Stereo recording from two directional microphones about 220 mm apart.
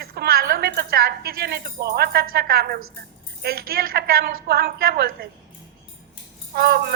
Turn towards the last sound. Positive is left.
turn(degrees=-45)  # may be behind; listen again after turning